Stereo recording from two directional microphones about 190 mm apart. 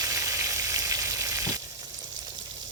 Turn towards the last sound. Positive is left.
turn(degrees=-15)  # may be behind; listen again after turning